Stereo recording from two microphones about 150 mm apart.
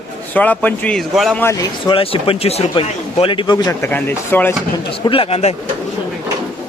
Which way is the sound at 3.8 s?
15° left (ahead or behind).